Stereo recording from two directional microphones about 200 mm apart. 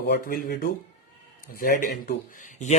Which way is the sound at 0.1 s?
50° left (ahead or behind).